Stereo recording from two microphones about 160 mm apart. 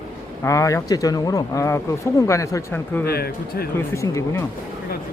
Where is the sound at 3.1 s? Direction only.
75° left (ahead or behind).